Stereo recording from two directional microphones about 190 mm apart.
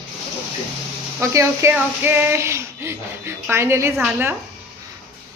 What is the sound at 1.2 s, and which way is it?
Speech, 15° right (ahead or behind).